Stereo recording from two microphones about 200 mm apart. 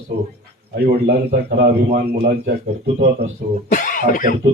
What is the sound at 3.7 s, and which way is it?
Speech, 45° left (ahead or behind).